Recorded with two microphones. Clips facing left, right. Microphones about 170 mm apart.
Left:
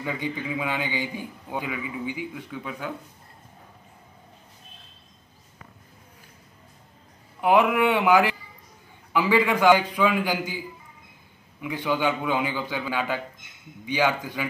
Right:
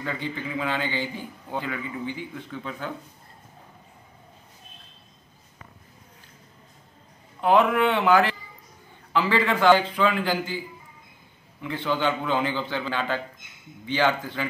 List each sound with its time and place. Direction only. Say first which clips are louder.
0.0 s a man's voice: left 1 dB; 15° left (ahead or behind)
7.3 s a man's voice: even; 10° left (ahead or behind)
11.6 s a man's voice: left 1 dB; 10° left (ahead or behind)